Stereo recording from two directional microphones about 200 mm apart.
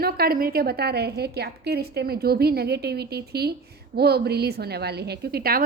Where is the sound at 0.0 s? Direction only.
50° right (ahead or behind).